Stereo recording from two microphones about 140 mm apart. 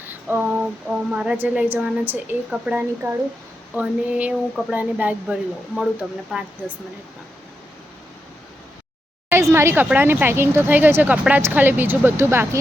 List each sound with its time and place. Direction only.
0.0 s speech: 15° right (ahead or behind)
9.3 s speech: 20° right (ahead or behind)